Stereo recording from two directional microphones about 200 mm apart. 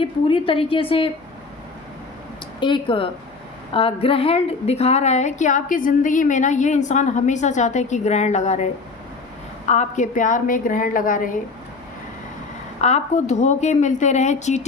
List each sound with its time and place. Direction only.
0.0 s a woman's voice: 25° left (ahead or behind)
2.6 s a woman's voice: 25° left (ahead or behind); by 11.3 s 45° left (ahead or behind)
12.8 s a woman's voice: 35° left (ahead or behind)